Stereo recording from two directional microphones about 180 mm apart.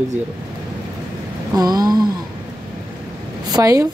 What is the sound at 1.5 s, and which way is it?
Speech, 20° right (ahead or behind).